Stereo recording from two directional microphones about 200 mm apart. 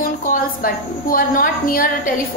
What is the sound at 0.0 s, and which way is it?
A woman's voice, 45° left (ahead or behind).